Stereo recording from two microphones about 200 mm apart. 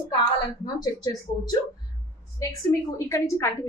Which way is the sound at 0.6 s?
20° left (ahead or behind).